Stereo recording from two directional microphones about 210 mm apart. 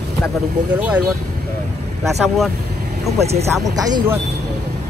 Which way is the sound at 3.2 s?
30° right (ahead or behind).